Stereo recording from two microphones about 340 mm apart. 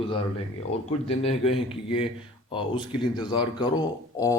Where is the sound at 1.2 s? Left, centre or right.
Centre.